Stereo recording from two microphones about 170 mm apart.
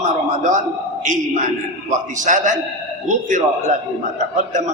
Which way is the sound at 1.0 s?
45° right (ahead or behind).